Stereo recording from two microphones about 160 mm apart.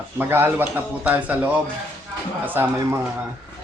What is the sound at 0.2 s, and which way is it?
A man's voice, 15° right (ahead or behind).